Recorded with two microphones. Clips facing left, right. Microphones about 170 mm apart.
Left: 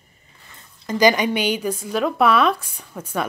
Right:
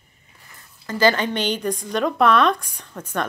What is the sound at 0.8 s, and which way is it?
A woman's voice, 15° left (ahead or behind).